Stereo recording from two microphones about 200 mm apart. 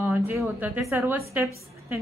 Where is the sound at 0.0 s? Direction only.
10° right (ahead or behind).